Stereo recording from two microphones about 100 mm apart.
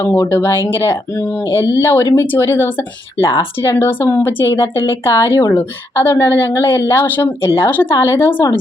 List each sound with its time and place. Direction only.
0.0 s speech: 20° left (ahead or behind)